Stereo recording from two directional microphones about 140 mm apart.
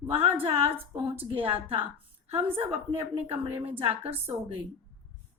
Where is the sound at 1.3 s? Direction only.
40° right (ahead or behind).